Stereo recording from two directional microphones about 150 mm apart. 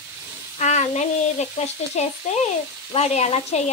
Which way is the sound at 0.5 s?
50° left (ahead or behind).